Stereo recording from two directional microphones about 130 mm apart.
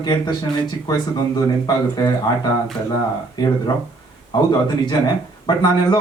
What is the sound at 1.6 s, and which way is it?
A man's voice, 30° left (ahead or behind).